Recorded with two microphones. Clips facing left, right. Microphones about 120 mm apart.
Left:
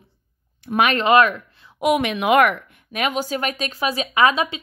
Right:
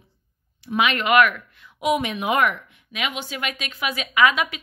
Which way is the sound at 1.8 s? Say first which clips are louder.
Left 3 dB; 65° left (ahead or behind).